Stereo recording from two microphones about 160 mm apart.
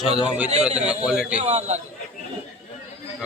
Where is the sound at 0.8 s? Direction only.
5° right (ahead or behind).